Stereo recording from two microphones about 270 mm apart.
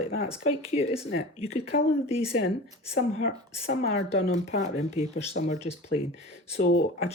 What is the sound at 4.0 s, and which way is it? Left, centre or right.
Speech, left.